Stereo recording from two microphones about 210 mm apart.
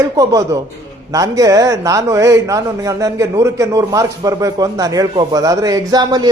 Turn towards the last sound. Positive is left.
turn(degrees=-20)  # may be behind; listen again after turning